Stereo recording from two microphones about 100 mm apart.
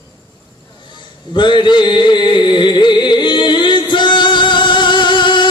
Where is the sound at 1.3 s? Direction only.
55° left (ahead or behind).